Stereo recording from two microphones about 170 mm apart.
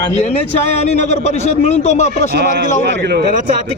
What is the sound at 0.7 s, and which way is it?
Speech, 40° left (ahead or behind).